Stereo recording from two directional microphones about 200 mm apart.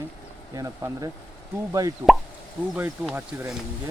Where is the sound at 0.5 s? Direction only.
15° right (ahead or behind).